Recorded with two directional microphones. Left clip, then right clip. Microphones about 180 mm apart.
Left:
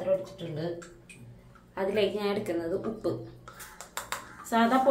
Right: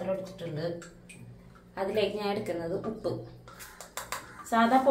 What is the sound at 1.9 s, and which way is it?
Speech, 15° left (ahead or behind).